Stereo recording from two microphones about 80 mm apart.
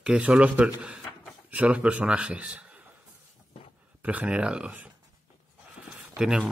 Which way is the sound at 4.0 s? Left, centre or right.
Centre.